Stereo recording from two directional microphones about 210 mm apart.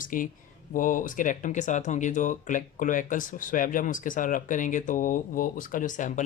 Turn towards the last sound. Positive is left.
turn(degrees=35)  # may be behind; listen again after turning